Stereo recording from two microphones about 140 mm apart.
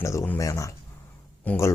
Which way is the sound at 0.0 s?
20° left (ahead or behind).